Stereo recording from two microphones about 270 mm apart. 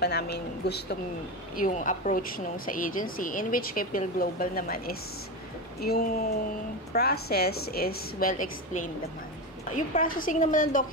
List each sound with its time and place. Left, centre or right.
0.0 s a woman's voice: left